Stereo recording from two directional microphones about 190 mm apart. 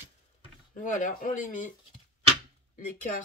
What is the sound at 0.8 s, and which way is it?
Speech, 45° left (ahead or behind).